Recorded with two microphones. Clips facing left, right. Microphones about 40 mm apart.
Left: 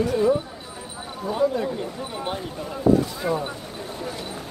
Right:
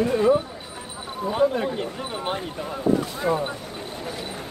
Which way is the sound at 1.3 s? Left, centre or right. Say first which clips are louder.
Right 1 dB; right.